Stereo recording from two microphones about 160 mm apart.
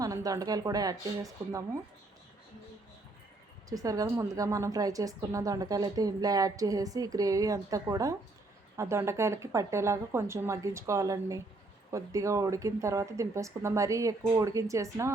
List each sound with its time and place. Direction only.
0.0 s a woman's voice: 20° right (ahead or behind)
3.7 s a woman's voice: 20° right (ahead or behind)